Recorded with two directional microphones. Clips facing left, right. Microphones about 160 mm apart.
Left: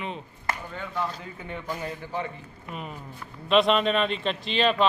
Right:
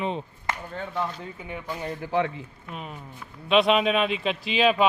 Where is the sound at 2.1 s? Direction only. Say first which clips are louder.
Right 8 dB; 90° right.